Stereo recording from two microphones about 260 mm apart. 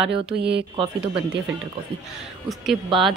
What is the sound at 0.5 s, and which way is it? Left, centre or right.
Speech, right.